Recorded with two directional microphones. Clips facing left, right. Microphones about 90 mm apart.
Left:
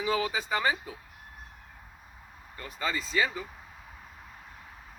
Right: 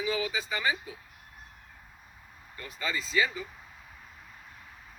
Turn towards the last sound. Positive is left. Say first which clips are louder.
# even
turn(degrees=35)  # may be behind; listen again after turning